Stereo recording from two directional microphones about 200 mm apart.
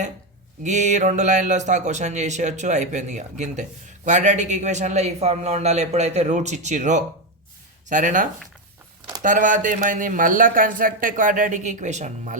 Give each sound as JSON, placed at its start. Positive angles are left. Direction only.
{"t": 0.6, "sound": "speech", "side_deg": -35}